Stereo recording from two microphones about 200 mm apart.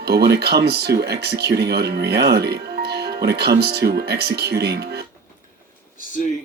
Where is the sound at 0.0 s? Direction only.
55° right (ahead or behind).